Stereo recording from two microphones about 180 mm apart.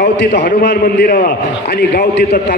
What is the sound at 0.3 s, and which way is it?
A man's voice, 45° left (ahead or behind).